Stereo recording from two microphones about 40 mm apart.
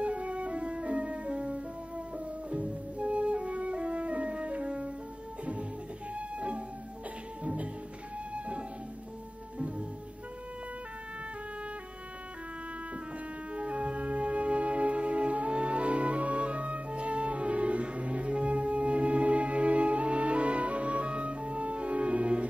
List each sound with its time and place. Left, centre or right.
0.0 s music: right
13.6 s music: right